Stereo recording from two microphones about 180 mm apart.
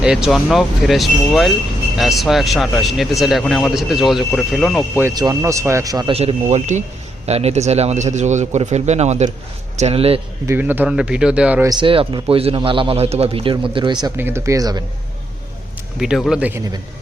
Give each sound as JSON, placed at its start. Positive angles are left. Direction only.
{"t": 0.0, "sound": "speech", "side_deg": -5}
{"t": 5.0, "sound": "speech", "side_deg": -20}
{"t": 6.1, "sound": "a man's voice", "side_deg": -35}
{"t": 10.4, "sound": "speech", "side_deg": -10}
{"t": 11.7, "sound": "a man's voice", "side_deg": -30}
{"t": 14.2, "sound": "speech", "side_deg": -15}
{"t": 16.0, "sound": "speech", "side_deg": 0}